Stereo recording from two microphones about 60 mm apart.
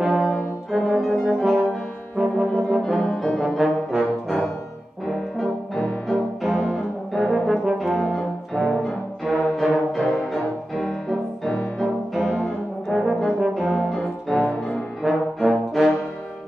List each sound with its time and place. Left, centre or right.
0.0 s brass instrument: centre
0.7 s music: centre
2.1 s brass instrument: centre
2.9 s brass instrument: centre
7.5 s brass instrument: centre
8.8 s music: centre
12.4 s brass instrument: centre